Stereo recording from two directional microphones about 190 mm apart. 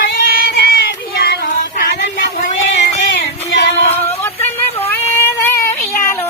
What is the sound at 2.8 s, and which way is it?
Music, 65° left (ahead or behind).